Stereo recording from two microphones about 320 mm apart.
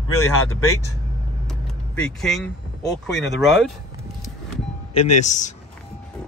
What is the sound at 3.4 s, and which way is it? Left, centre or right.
Speech, centre.